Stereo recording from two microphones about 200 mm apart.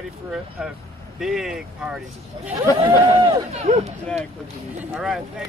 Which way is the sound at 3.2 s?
30° right (ahead or behind).